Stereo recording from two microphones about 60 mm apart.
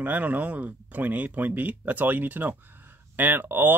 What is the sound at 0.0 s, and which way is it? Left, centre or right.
Speech, right.